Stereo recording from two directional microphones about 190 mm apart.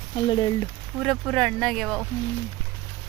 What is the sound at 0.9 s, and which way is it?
Speech, centre (ahead or behind).